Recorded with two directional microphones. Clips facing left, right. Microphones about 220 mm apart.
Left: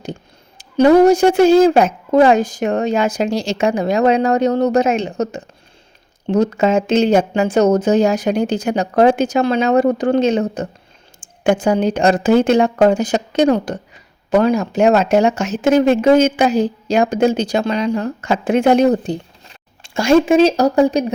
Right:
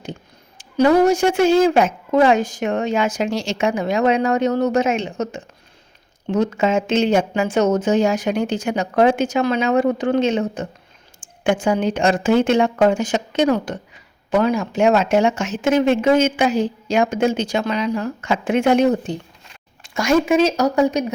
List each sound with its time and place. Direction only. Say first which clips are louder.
0.6 s a woman's voice: left 4 dB; 35° left (ahead or behind)